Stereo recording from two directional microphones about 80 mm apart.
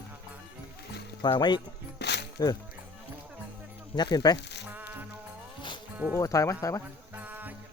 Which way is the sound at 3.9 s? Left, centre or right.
Left.